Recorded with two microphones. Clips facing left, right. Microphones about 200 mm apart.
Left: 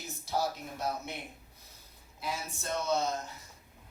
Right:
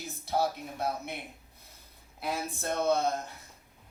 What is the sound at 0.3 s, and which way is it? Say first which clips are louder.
Speech: right 3 dB; 55° right (ahead or behind).